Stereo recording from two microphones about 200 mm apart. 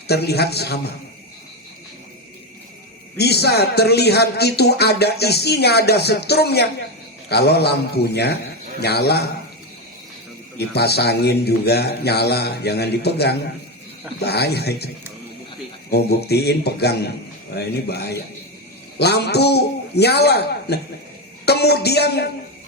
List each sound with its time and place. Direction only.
0.1 s speech: 55° left (ahead or behind)
3.2 s a man's voice: 55° left (ahead or behind)
10.6 s a man's voice: 55° left (ahead or behind)
15.9 s a man's voice: 55° left (ahead or behind)